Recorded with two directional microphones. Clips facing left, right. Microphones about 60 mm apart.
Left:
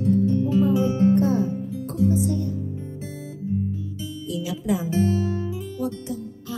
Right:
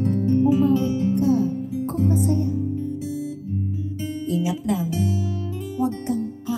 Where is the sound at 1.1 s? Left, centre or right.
Left.